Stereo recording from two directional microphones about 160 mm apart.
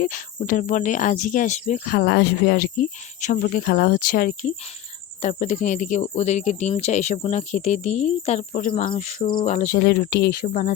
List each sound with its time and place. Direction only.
0.0 s speech: 55° left (ahead or behind); by 2.8 s 85° left
3.2 s speech: 55° left (ahead or behind)
5.2 s speech: 45° left (ahead or behind)
9.7 s speech: 90° left
10.4 s speech: 50° left (ahead or behind)